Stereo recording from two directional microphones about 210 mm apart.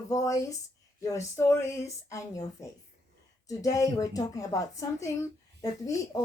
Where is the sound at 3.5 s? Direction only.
15° left (ahead or behind).